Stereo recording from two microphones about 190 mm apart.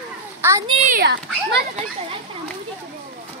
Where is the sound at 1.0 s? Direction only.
60° right (ahead or behind).